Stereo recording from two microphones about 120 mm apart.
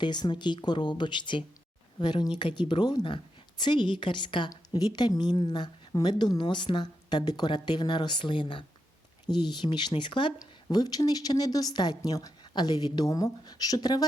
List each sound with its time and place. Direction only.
0.0 s a woman's voice: 40° left (ahead or behind)
10.3 s a woman's voice: 30° left (ahead or behind)